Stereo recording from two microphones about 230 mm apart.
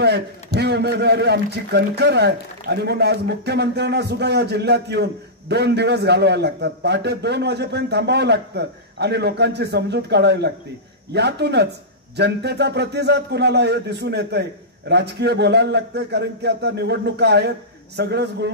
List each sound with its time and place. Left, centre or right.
0.6 s a man's voice: right